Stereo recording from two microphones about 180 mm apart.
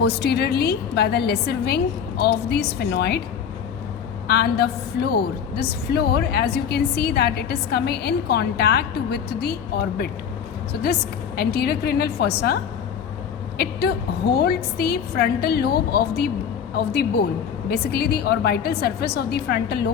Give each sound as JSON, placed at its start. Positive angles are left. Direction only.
{"t": 0.0, "sound": "a woman's voice", "side_deg": 65}
{"t": 4.3, "sound": "a woman's voice", "side_deg": 65}
{"t": 11.3, "sound": "a woman's voice", "side_deg": 60}
{"t": 13.6, "sound": "a woman's voice", "side_deg": 60}